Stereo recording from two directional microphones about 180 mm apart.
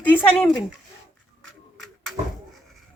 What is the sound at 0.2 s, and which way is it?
Speech, 10° left (ahead or behind).